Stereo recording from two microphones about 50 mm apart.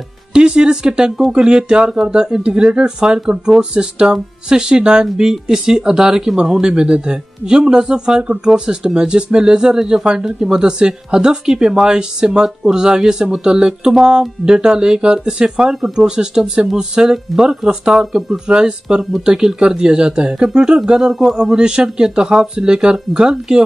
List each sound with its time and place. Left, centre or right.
0.3 s speech: centre